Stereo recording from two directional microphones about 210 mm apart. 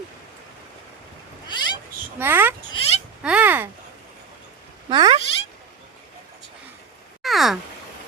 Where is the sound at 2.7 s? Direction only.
30° left (ahead or behind).